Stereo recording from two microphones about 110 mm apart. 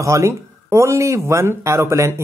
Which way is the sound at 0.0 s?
25° right (ahead or behind).